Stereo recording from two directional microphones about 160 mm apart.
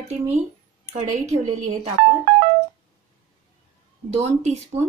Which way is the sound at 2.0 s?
50° right (ahead or behind).